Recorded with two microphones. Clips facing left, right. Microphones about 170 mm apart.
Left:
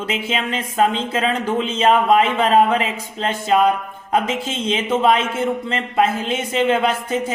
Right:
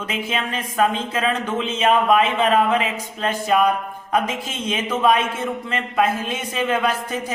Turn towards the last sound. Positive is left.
turn(degrees=25)  # may be behind; listen again after turning